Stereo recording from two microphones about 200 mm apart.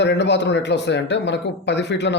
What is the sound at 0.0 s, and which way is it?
Speech, 60° left (ahead or behind).